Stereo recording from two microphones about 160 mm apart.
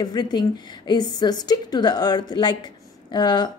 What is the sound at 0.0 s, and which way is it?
A woman's voice, 25° left (ahead or behind).